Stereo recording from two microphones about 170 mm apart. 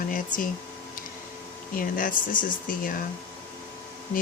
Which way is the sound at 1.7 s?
50° left (ahead or behind).